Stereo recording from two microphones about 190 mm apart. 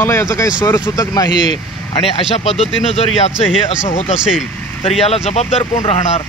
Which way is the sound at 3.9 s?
35° left (ahead or behind).